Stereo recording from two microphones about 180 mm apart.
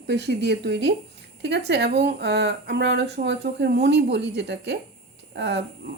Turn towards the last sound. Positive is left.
turn(degrees=-70)  # may be behind; listen again after turning